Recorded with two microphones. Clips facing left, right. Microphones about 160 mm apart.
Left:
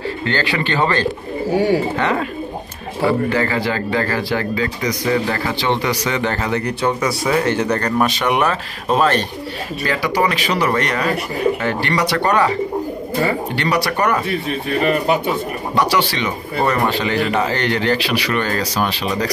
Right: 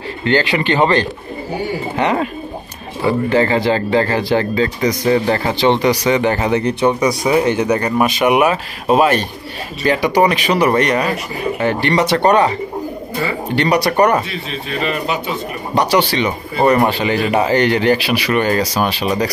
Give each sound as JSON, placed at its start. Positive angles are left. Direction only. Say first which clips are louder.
{"t": 0.2, "sound": "speech", "louder": "right 7 dB", "side_deg": -20}
{"t": 3.3, "sound": "speech", "louder": "right 5 dB", "side_deg": -25}
{"t": 13.6, "sound": "speech", "louder": "right 7 dB", "side_deg": -15}
{"t": 14.3, "sound": "speech", "louder": "left 4 dB", "side_deg": 55}
{"t": 15.7, "sound": "speech", "louder": "right 3 dB", "side_deg": -20}